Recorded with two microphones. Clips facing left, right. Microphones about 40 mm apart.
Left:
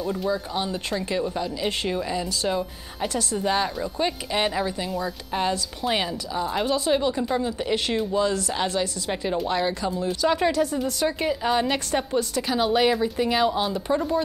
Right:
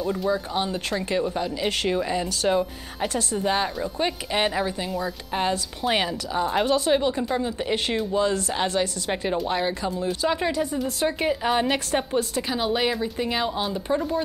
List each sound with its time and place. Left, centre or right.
0.0 s speech: centre
1.4 s a woman's voice: right
2.1 s a woman's voice: right
3.4 s speech: centre
4.9 s speech: centre
5.5 s a woman's voice: right
6.9 s a woman's voice: centre; by 8.8 s right
9.5 s speech: centre
10.0 s speech: centre
10.5 s a woman's voice: centre
12.5 s speech: centre